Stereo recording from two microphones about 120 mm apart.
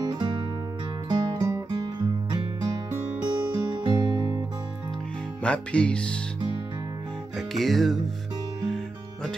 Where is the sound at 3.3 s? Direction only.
35° right (ahead or behind).